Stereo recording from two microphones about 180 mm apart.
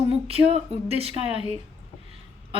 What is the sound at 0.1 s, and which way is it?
A woman's voice, 35° right (ahead or behind).